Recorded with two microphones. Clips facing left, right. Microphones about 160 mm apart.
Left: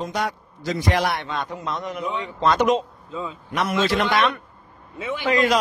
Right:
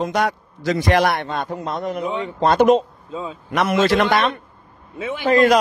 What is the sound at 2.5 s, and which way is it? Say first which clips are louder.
Speech: right 6 dB; 50° right (ahead or behind).